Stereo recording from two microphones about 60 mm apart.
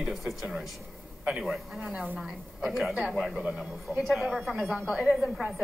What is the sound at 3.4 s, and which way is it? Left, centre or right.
Speech, centre.